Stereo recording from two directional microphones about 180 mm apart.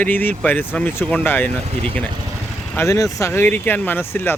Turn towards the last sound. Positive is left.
turn(degrees=10)  # may be behind; listen again after turning